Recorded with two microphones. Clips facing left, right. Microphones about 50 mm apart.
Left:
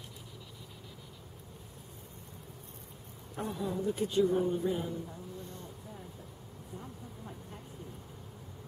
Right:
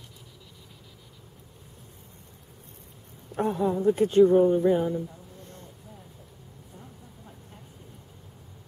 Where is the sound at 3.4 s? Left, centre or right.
Right.